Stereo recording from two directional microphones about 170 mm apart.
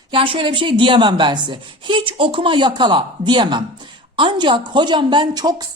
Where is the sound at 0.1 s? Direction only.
30° right (ahead or behind).